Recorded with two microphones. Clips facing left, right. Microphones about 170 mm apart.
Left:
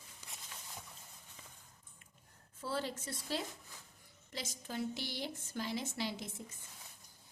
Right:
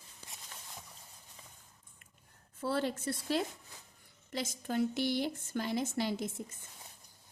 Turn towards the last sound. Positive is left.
turn(degrees=-50)  # may be behind; listen again after turning